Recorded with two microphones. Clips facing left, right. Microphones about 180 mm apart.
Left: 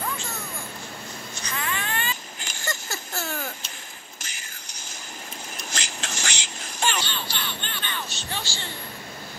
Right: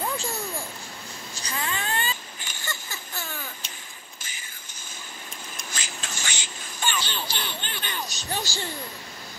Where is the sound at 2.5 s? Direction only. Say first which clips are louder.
Left 5 dB; 45° left (ahead or behind).